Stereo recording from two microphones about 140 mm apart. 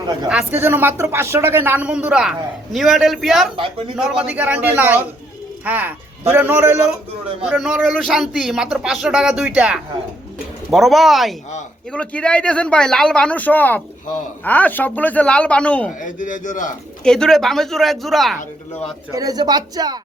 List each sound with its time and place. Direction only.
0.3 s speech: 10° right (ahead or behind)
7.4 s speech: 5° right (ahead or behind)
16.0 s a man's voice: 65° left (ahead or behind)
17.0 s speech: 5° left (ahead or behind)
19.1 s speech: 25° right (ahead or behind)